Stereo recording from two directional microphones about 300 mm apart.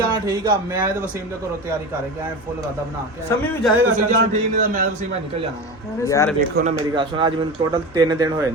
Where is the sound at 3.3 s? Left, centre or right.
Centre.